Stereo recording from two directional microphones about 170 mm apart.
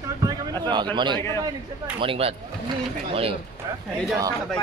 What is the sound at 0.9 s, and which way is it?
Speech, 25° right (ahead or behind).